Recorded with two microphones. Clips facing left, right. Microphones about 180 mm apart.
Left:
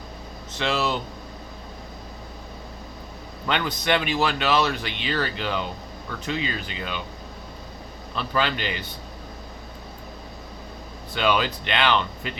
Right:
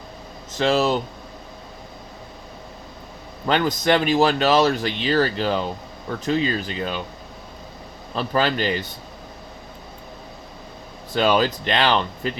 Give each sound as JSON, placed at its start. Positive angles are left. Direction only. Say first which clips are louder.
{"t": 0.5, "sound": "speech", "louder": "right 6 dB", "side_deg": -40}
{"t": 3.4, "sound": "speech", "louder": "right 6 dB", "side_deg": -40}
{"t": 8.1, "sound": "speech", "louder": "right 4 dB", "side_deg": -40}
{"t": 11.1, "sound": "speech", "louder": "right 4 dB", "side_deg": -40}